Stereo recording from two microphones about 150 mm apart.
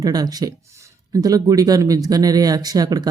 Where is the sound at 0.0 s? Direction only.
25° right (ahead or behind).